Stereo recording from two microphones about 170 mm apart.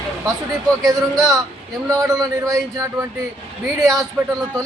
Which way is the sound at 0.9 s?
20° right (ahead or behind).